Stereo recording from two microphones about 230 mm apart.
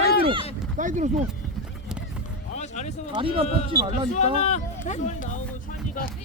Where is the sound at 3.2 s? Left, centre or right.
Right.